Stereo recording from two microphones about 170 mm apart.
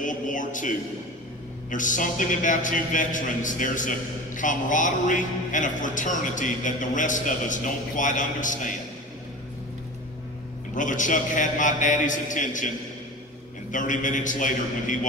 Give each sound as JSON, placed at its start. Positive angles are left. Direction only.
{"t": 0.0, "sound": "a man's voice", "side_deg": 50}
{"t": 10.7, "sound": "a man's voice", "side_deg": 50}